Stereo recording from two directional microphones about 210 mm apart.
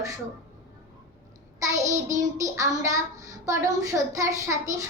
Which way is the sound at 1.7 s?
15° right (ahead or behind).